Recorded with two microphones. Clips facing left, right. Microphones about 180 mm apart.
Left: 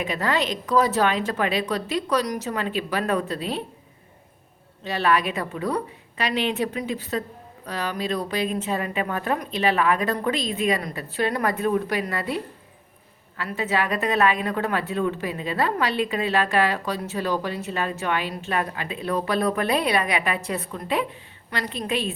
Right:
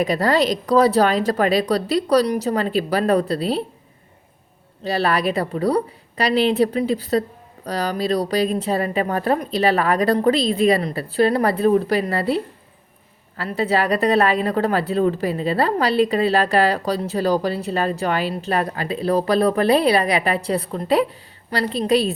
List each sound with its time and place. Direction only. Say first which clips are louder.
0.0 s a woman's voice: right 7 dB; 35° right (ahead or behind)
4.8 s a woman's voice: right 3 dB; 35° right (ahead or behind)